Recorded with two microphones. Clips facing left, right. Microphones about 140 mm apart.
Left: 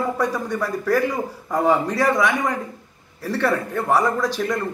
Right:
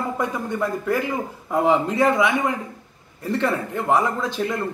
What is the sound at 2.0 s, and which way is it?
A man's voice, 10° right (ahead or behind).